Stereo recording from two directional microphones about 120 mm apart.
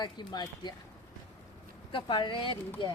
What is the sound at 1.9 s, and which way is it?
Speech, 40° left (ahead or behind).